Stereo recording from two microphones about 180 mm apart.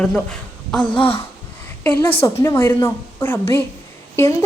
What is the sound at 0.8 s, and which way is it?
Speech, 25° left (ahead or behind).